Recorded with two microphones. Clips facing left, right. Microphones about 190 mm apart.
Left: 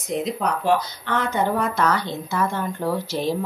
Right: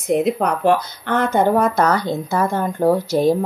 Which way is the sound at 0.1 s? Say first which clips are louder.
Right 7 dB; 55° right (ahead or behind).